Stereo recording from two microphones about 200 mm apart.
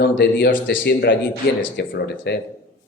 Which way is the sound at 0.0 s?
55° left (ahead or behind).